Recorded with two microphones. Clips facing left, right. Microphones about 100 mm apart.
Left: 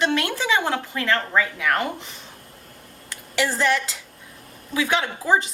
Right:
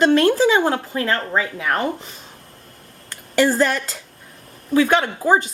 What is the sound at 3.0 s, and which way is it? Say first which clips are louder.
A woman's voice: right 7 dB; 45° right (ahead or behind).